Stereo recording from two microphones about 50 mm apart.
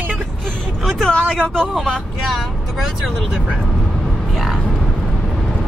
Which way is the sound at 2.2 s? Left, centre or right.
Centre.